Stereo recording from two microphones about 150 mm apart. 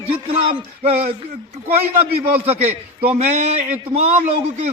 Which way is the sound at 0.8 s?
45° right (ahead or behind).